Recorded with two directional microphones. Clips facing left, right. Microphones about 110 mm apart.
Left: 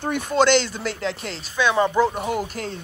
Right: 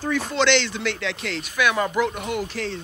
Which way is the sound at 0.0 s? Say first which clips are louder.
Left 2 dB; 50° left (ahead or behind).